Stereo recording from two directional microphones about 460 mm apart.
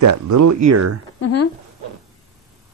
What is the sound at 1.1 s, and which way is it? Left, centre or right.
Speech, left.